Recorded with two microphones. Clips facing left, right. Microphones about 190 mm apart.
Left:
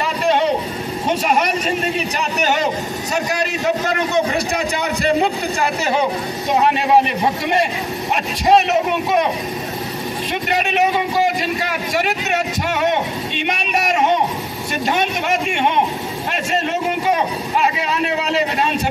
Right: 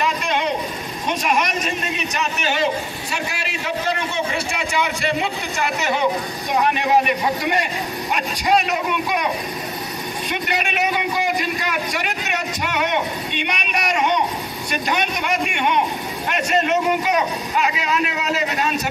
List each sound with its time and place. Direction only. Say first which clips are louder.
1.0 s a man's voice: left 3 dB; 30° left (ahead or behind)
6.5 s speech: left 3 dB; 30° left (ahead or behind)
8.5 s speech: left 5 dB; 25° left (ahead or behind)
17.6 s a sound: left 2 dB; 30° left (ahead or behind)